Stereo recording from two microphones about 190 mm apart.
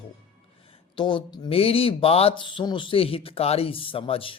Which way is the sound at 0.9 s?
25° left (ahead or behind).